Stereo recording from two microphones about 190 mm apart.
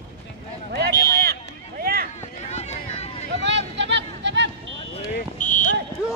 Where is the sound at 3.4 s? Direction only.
70° right (ahead or behind).